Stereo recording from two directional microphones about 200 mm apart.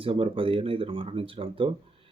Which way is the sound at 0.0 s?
25° right (ahead or behind).